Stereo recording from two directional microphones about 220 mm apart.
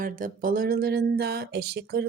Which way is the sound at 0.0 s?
40° right (ahead or behind).